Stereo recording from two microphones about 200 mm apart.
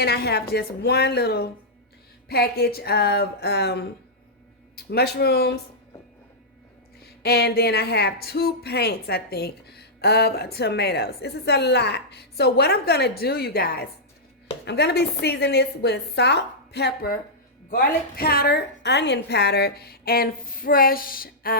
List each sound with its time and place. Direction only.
0.0 s speech: 55° left (ahead or behind)
4.9 s speech: 55° left (ahead or behind)
7.0 s speech: 55° left (ahead or behind)